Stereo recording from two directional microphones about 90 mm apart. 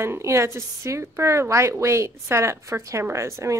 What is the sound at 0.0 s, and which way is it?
A woman's voice, 30° right (ahead or behind).